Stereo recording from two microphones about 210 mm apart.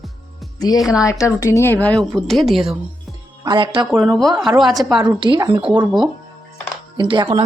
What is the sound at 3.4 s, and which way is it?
Speech, 20° right (ahead or behind).